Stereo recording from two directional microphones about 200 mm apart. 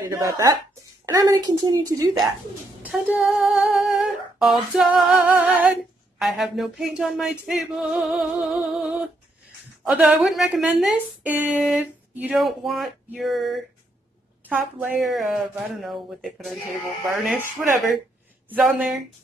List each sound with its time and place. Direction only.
0.0 s a woman's voice: 15° right (ahead or behind)
2.8 s female singing: 5° right (ahead or behind)